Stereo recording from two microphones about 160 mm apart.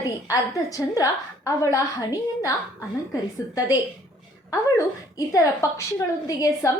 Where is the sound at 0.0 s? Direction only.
20° left (ahead or behind).